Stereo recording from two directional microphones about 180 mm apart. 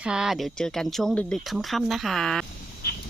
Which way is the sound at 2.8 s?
60° left (ahead or behind).